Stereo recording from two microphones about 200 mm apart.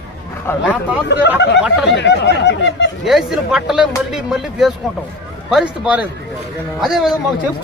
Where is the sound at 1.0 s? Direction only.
60° left (ahead or behind).